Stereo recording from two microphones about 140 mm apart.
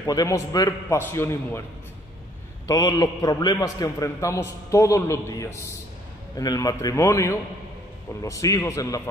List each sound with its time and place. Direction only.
0.0 s a man's voice: 25° left (ahead or behind)
2.6 s a man's voice: 25° left (ahead or behind)